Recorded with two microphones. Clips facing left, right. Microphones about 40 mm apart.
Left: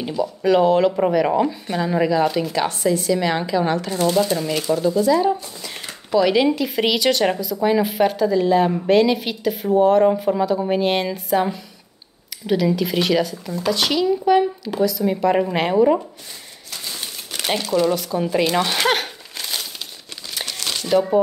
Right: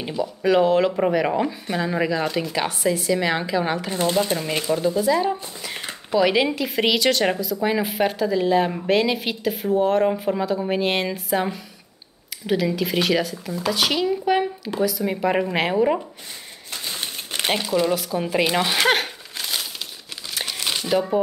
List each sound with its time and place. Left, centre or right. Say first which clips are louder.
0.0 s a woman's voice: left 2 dB; centre
3.9 s speech: left 2 dB; right
4.8 s a woman's voice: left 4 dB; centre
17.0 s crumpling: right 3 dB; right
17.6 s speech: left 5 dB; centre
20.3 s crumpling: right 1 dB; centre